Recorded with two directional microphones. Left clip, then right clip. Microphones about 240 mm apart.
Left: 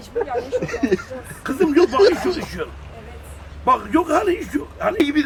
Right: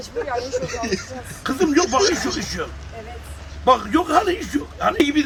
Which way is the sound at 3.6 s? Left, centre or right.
Centre.